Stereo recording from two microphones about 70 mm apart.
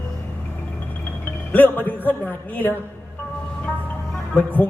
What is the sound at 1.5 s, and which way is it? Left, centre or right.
Speech, left.